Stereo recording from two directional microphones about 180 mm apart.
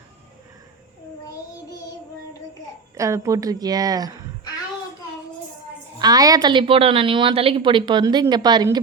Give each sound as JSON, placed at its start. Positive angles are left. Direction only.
{"t": 2.9, "sound": "a woman's voice", "side_deg": -15}
{"t": 6.0, "sound": "a woman's voice", "side_deg": -20}